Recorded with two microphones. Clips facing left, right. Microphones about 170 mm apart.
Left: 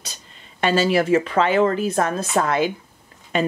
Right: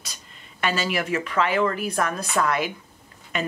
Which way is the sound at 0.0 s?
25° left (ahead or behind).